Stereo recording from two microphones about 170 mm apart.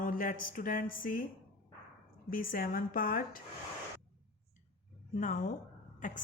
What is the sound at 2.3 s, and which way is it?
Speech, 55° left (ahead or behind).